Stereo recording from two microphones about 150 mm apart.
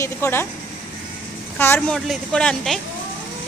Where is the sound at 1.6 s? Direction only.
15° left (ahead or behind).